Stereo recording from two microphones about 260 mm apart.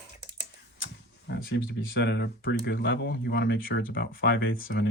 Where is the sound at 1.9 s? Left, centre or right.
Left.